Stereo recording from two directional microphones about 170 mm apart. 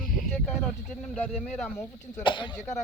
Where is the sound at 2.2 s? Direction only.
30° left (ahead or behind).